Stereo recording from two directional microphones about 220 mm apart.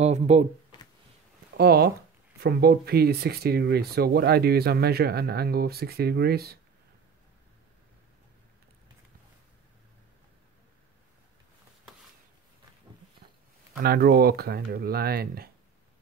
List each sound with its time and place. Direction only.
0.0 s speech: 30° right (ahead or behind)
1.6 s speech: 45° right (ahead or behind)
13.8 s speech: 45° right (ahead or behind)